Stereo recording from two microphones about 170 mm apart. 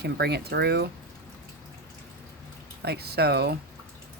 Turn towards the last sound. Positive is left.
turn(degrees=-70)  # may be behind; listen again after turning